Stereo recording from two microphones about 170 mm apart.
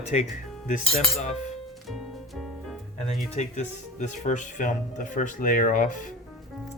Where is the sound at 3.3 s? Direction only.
40° left (ahead or behind).